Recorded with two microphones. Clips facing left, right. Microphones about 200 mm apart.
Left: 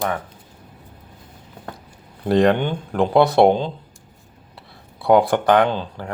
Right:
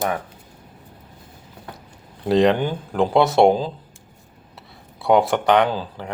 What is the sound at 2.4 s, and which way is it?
Speech, 5° right (ahead or behind).